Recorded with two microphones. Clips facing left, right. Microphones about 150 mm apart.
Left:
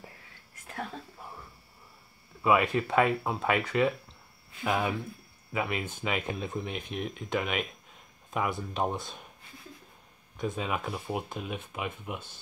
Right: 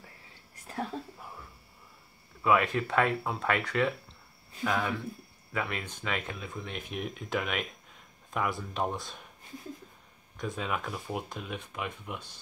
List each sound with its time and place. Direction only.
0.6 s a sound: 35° right (ahead or behind)
2.4 s speech: 5° left (ahead or behind)
4.6 s speech: 20° left (ahead or behind)
6.4 s speech: 20° left (ahead or behind)
6.8 s speech: 5° right (ahead or behind)
10.3 s speech: centre (ahead or behind)